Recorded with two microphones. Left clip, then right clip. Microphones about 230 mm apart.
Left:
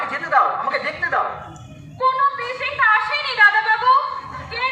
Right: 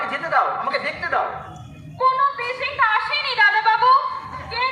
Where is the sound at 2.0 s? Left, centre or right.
Right.